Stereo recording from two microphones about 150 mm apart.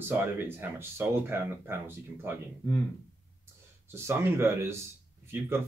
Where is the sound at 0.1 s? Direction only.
15° right (ahead or behind).